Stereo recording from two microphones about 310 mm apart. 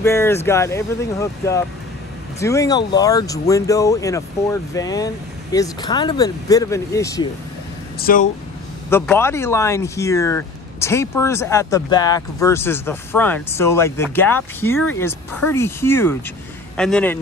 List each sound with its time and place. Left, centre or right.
0.0 s speech: centre
8.0 s speech: left
8.9 s speech: centre